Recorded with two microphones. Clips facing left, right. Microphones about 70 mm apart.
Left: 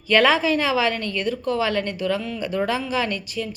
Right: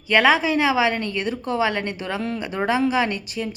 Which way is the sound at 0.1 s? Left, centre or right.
Centre.